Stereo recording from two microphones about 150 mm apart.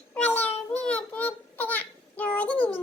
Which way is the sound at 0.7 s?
10° left (ahead or behind).